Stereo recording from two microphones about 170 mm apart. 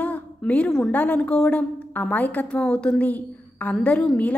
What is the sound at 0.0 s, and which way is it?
A woman's voice, 10° left (ahead or behind).